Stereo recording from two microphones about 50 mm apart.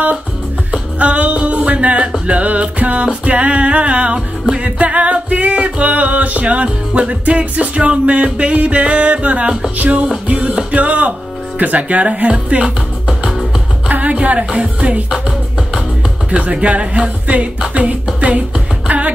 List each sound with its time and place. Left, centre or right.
0.7 s music: right
10.2 s speech: centre
10.8 s speech: right
12.6 s music: centre
13.8 s music: right
14.2 s speech: right
14.6 s music: centre
16.3 s speech: right
18.9 s music: right